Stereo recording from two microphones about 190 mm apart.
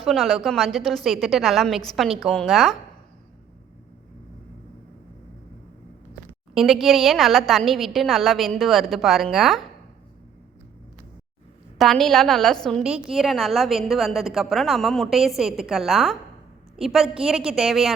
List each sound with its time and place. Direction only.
0.0 s a woman's voice: centre (ahead or behind)
6.5 s a woman's voice: centre (ahead or behind)
11.8 s a woman's voice: centre (ahead or behind)